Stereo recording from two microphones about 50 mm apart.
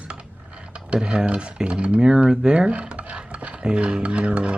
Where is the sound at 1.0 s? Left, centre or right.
Right.